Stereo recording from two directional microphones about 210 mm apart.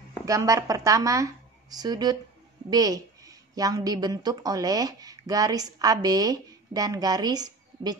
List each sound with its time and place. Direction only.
0.2 s a woman's voice: 15° right (ahead or behind)